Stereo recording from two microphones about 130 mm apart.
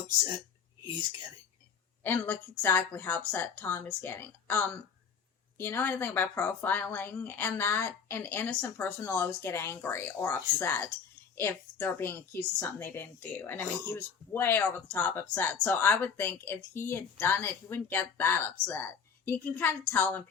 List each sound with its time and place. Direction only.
2.0 s a woman's voice: 15° left (ahead or behind)